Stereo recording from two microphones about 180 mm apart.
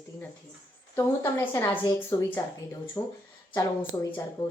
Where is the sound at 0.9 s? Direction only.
15° left (ahead or behind).